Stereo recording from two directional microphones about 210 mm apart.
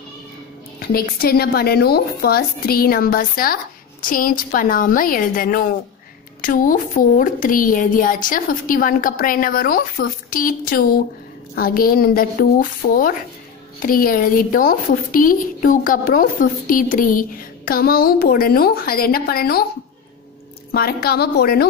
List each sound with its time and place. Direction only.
0.7 s a woman's voice: 45° left (ahead or behind)
20.7 s a woman's voice: 45° left (ahead or behind)